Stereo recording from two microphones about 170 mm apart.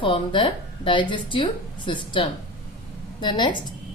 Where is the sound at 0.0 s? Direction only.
30° left (ahead or behind).